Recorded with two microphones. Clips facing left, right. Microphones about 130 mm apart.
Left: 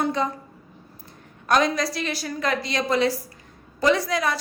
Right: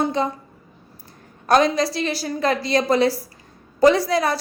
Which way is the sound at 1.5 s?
30° right (ahead or behind).